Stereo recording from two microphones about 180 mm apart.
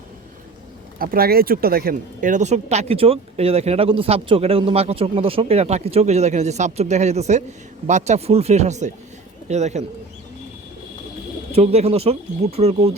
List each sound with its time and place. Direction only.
0.9 s speech: 55° right (ahead or behind)
11.5 s speech: 35° right (ahead or behind)